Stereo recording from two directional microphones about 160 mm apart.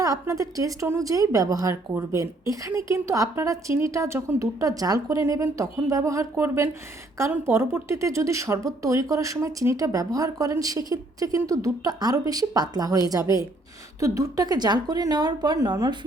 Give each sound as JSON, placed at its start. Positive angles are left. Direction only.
{"t": 0.0, "sound": "speech", "side_deg": -20}